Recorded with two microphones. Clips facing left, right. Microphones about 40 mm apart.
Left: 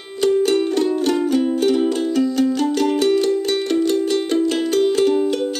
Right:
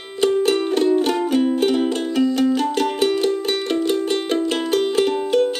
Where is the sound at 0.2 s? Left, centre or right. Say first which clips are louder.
Left 1 dB; centre.